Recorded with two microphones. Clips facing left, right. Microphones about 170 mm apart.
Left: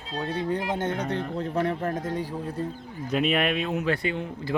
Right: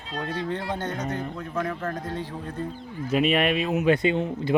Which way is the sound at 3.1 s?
Centre (ahead or behind).